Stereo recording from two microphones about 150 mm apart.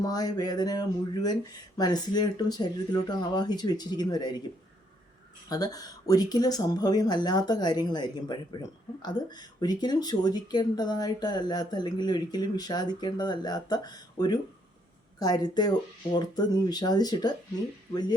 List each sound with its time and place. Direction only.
0.0 s speech: 25° left (ahead or behind)
5.5 s speech: 25° left (ahead or behind)